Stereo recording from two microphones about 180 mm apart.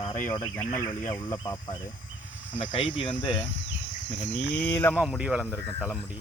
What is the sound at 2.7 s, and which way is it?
Speech, 30° left (ahead or behind).